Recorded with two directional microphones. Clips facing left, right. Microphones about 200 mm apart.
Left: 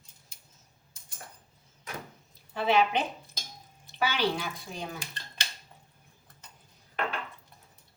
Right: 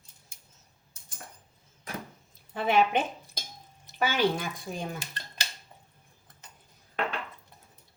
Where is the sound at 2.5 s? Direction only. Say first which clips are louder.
Right 1 dB; 50° right (ahead or behind).